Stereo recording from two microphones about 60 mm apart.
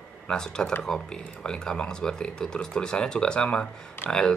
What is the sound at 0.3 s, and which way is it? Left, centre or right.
Speech, centre.